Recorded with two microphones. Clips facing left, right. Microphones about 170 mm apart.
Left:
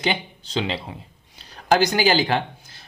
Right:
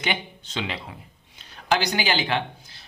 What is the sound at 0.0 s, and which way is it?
Speech, 35° left (ahead or behind).